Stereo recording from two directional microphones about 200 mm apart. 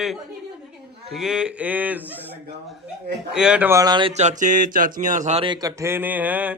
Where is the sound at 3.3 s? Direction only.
5° right (ahead or behind).